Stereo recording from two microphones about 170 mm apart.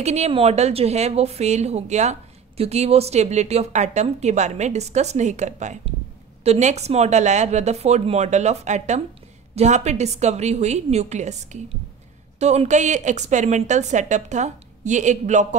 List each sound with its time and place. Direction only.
0.0 s a woman's voice: 40° right (ahead or behind)